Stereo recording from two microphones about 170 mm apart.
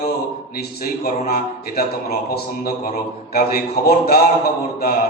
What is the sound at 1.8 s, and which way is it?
Speech, 60° left (ahead or behind).